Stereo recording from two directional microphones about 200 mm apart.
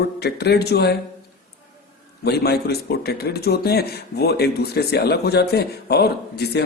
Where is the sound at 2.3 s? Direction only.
55° left (ahead or behind).